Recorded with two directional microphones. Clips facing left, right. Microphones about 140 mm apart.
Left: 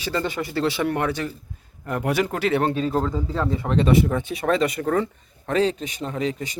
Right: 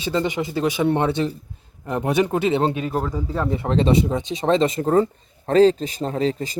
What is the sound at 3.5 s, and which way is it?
Speech, 30° right (ahead or behind).